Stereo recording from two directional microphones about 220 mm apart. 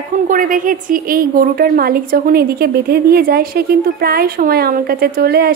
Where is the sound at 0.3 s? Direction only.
35° right (ahead or behind).